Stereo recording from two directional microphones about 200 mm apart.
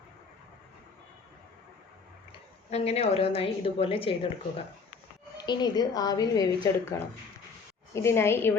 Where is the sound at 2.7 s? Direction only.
30° left (ahead or behind).